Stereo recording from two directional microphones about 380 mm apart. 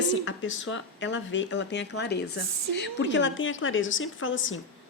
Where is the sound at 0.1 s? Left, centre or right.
Left.